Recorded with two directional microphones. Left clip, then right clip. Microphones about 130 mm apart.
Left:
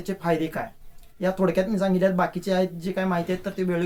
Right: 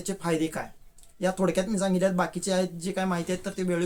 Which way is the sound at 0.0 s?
20° right (ahead or behind).